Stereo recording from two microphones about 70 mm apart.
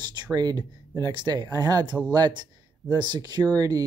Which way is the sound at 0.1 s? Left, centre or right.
Right.